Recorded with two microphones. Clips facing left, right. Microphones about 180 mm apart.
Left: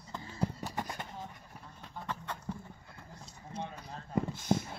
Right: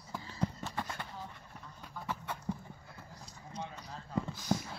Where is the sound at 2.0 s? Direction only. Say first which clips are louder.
Even; 10° right (ahead or behind).